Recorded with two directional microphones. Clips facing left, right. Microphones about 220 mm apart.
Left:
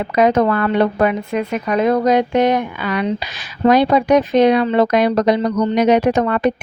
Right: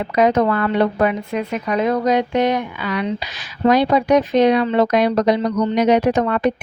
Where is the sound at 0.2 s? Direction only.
55° left (ahead or behind).